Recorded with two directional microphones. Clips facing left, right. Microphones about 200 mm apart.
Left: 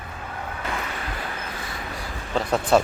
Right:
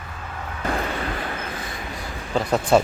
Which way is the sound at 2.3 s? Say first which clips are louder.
Right 2 dB; centre (ahead or behind).